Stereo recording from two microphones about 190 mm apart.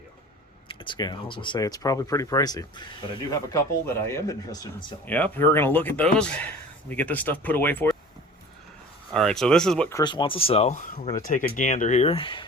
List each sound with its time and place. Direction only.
0.7 s speech: 25° left (ahead or behind); by 7.9 s 10° left (ahead or behind)
9.1 s speech: centre (ahead or behind)
9.9 s speech: 25° left (ahead or behind)